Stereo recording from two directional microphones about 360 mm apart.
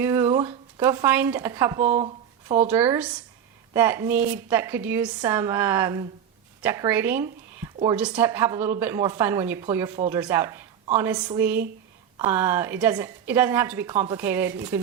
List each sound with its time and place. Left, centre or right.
0.0 s speech: centre
2.6 s speech: centre